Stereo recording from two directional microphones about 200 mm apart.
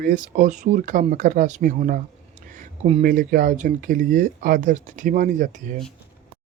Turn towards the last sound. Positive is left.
turn(degrees=-45)  # may be behind; listen again after turning